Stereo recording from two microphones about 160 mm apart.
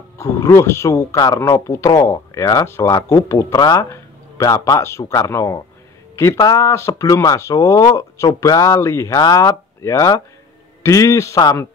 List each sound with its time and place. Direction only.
0.2 s speech: 20° left (ahead or behind)